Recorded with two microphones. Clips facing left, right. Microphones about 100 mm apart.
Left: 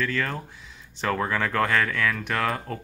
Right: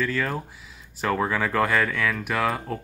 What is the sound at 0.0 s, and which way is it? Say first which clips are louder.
Speech: right 2 dB; 5° right (ahead or behind).